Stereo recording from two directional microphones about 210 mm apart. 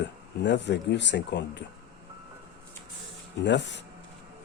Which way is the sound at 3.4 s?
55° left (ahead or behind).